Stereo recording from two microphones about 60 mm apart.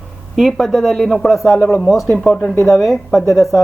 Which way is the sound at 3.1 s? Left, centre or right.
Left.